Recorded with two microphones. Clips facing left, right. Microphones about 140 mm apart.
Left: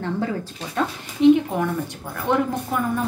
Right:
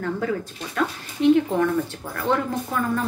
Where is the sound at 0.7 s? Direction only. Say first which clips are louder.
Left 1 dB; 20° left (ahead or behind).